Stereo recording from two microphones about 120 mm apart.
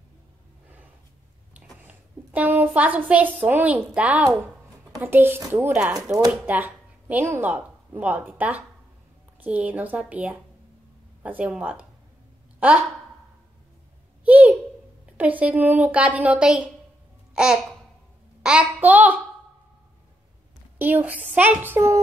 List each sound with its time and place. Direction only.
1.5 s a woman's voice: 10° right (ahead or behind)
12.5 s a sound: 15° right (ahead or behind)
14.2 s a sound: 15° right (ahead or behind)
15.1 s a woman's voice: 10° right (ahead or behind)
18.4 s a child's voice: 5° right (ahead or behind)
20.7 s a woman's voice: 15° right (ahead or behind)